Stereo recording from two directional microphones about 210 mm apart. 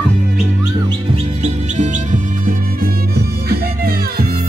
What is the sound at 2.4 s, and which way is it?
Music, 45° right (ahead or behind).